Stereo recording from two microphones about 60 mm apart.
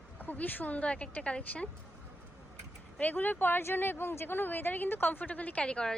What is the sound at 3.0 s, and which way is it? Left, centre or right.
Speech, left.